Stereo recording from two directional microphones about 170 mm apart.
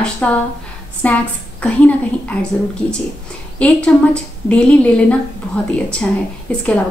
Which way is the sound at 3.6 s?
5° left (ahead or behind).